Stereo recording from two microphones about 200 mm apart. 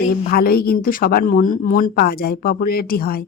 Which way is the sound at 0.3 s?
50° left (ahead or behind).